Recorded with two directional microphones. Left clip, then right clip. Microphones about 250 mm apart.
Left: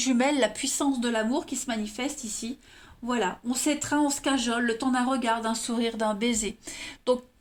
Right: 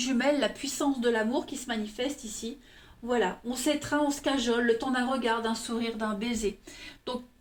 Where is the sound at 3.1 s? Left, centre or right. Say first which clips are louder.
Even; left.